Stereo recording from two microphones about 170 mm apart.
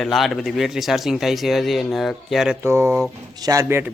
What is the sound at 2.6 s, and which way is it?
Speech, 15° right (ahead or behind).